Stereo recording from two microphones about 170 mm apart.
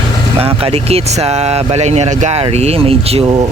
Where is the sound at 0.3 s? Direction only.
35° right (ahead or behind).